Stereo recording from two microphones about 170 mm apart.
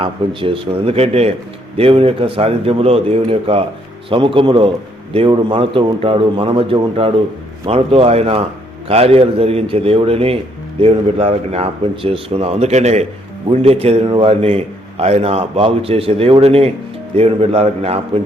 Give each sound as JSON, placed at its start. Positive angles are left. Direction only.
{"t": 0.0, "sound": "a man's voice", "side_deg": -30}